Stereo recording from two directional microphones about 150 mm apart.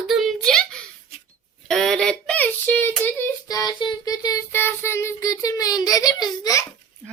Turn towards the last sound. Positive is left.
turn(degrees=25)  # may be behind; listen again after turning